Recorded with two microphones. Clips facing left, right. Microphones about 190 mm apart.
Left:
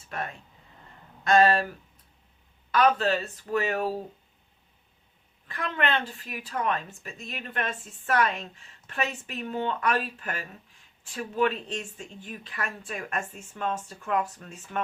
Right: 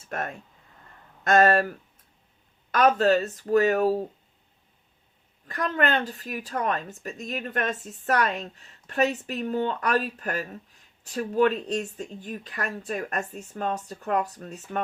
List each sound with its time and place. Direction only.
0.1 s speech: 50° right (ahead or behind)
2.7 s a woman's voice: 45° right (ahead or behind)
5.5 s a woman's voice: 40° right (ahead or behind)